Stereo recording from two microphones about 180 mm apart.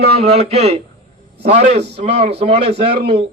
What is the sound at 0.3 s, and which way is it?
A man's voice, 35° right (ahead or behind).